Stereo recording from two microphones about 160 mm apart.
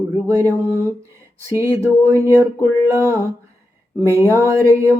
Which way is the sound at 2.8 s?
20° right (ahead or behind).